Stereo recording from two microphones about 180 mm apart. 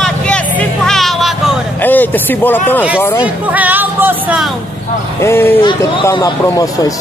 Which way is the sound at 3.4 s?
10° right (ahead or behind).